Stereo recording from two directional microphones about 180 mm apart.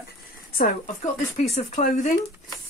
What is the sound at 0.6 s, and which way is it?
Speech, 35° left (ahead or behind).